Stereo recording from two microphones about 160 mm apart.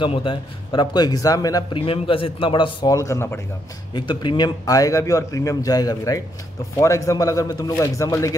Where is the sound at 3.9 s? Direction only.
30° left (ahead or behind).